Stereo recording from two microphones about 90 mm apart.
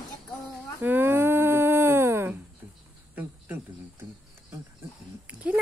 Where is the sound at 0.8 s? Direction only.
25° right (ahead or behind).